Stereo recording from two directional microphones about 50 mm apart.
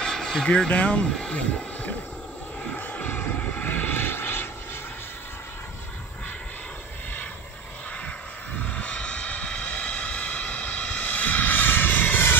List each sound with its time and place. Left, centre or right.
0.0 s vehicle: centre
0.5 s speech: left
2.9 s vehicle: left
8.6 s vehicle: left